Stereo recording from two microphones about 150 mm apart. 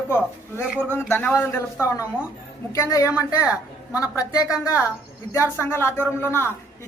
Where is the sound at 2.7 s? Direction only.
20° left (ahead or behind).